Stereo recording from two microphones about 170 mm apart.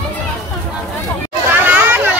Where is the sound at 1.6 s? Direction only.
10° right (ahead or behind).